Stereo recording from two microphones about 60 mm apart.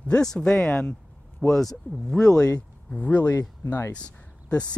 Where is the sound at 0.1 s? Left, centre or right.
Centre.